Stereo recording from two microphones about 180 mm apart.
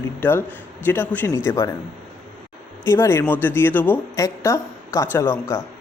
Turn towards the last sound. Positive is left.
turn(degrees=15)  # may be behind; listen again after turning